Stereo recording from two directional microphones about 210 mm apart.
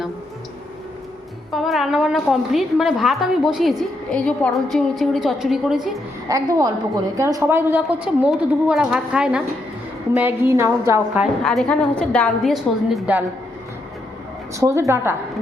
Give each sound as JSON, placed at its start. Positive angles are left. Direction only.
{"t": 1.5, "sound": "a woman's voice", "side_deg": 0}
{"t": 6.2, "sound": "a woman's voice", "side_deg": -15}
{"t": 11.4, "sound": "a woman's voice", "side_deg": 5}
{"t": 14.6, "sound": "a woman's voice", "side_deg": -15}